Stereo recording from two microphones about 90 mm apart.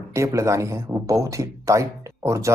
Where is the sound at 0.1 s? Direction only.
35° right (ahead or behind).